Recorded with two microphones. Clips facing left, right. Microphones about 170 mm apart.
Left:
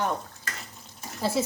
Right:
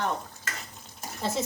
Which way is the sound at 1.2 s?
10° left (ahead or behind).